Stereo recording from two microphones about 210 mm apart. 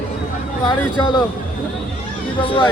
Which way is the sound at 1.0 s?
20° left (ahead or behind).